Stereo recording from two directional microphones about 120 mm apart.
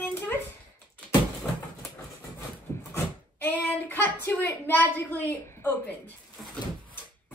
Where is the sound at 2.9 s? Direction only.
15° left (ahead or behind).